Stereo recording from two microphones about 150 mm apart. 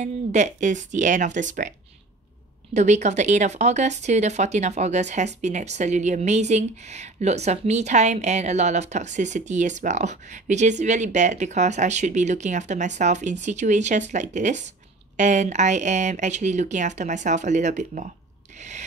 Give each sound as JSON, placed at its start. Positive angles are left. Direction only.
{"t": 0.0, "sound": "speech", "side_deg": -50}
{"t": 2.7, "sound": "speech", "side_deg": -50}